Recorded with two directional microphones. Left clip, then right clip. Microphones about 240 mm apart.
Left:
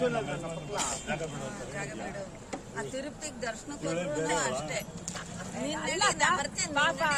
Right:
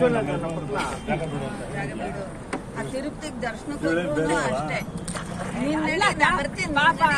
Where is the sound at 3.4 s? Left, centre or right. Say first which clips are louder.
Right 8 dB; left.